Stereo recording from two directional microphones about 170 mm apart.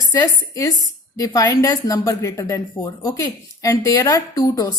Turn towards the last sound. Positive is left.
turn(degrees=20)  # may be behind; listen again after turning